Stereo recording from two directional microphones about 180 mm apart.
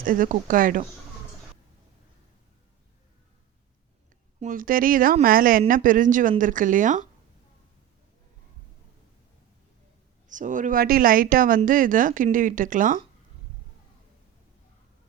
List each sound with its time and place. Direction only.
0.0 s speech: 50° right (ahead or behind)
4.4 s speech: 50° right (ahead or behind)
10.2 s speech: 45° right (ahead or behind)